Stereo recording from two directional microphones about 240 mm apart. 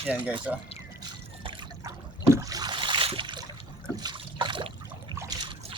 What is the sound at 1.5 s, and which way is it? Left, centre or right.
Trickle, centre.